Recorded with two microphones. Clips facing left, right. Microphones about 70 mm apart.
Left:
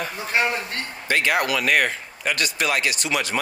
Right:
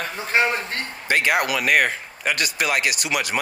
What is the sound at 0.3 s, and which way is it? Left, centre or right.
Speech, right.